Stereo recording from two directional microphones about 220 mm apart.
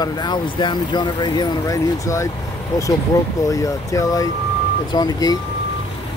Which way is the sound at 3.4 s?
15° left (ahead or behind).